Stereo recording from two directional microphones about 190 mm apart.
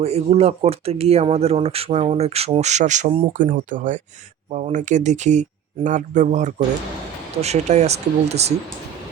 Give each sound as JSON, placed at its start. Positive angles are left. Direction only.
{"t": 0.0, "sound": "speech", "side_deg": -35}